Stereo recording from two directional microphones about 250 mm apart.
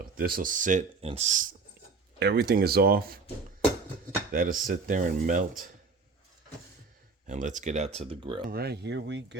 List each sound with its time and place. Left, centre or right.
0.2 s speech: right
2.1 s speech: right
4.3 s speech: right
7.3 s speech: right
8.4 s speech: right